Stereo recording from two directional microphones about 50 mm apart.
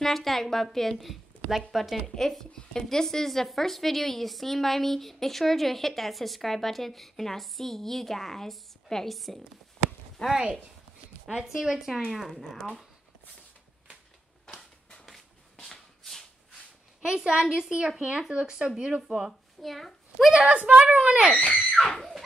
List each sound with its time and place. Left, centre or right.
0.0 s a woman's voice: centre
2.1 s a woman's voice: centre
10.3 s a woman's voice: centre
14.5 s a sound: left
15.0 s shuffle: centre
17.0 s a woman's voice: centre
19.0 s a woman's voice: centre
20.3 s a child's voice: right
21.7 s a woman's voice: centre